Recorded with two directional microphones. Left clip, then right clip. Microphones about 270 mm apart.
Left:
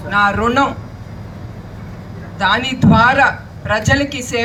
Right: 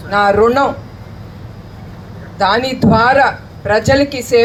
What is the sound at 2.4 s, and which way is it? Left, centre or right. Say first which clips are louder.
Speech: right 2 dB; centre.